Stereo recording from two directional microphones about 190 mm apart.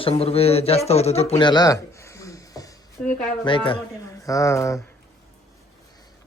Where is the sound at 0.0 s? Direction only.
30° left (ahead or behind).